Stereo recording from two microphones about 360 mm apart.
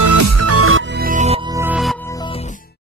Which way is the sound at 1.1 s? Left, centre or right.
Centre.